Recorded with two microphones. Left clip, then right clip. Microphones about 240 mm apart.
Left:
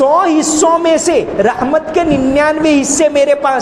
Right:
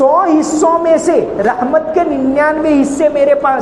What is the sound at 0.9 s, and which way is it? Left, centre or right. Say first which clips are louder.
A man's voice: right 1 dB; left.